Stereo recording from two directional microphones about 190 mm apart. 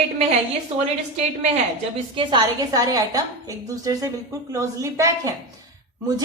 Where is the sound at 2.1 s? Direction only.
20° right (ahead or behind).